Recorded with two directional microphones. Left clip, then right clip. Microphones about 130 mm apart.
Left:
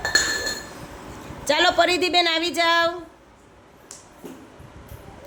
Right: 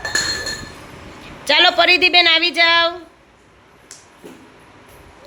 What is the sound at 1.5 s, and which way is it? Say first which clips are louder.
A woman's voice: right 6 dB; 10° left (ahead or behind).